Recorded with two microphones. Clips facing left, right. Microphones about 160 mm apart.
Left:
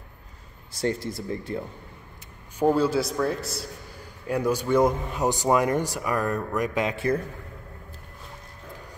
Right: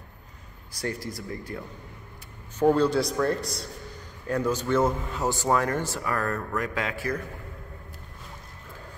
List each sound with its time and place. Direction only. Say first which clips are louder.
0.7 s speech: left 5 dB; 25° left (ahead or behind)
2.6 s speech: even; 5° left (ahead or behind); by 7.2 s 20° left (ahead or behind)